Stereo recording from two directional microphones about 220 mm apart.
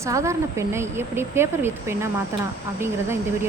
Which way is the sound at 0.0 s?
15° right (ahead or behind).